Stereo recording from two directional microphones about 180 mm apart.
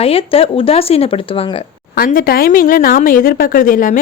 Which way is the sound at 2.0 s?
55° left (ahead or behind).